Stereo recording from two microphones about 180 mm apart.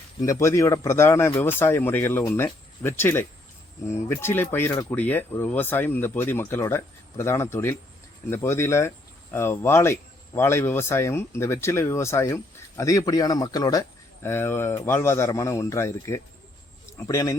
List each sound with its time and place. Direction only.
0.2 s speech: 15° left (ahead or behind)